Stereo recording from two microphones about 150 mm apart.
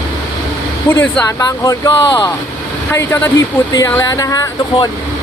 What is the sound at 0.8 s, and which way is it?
Speech, 10° left (ahead or behind).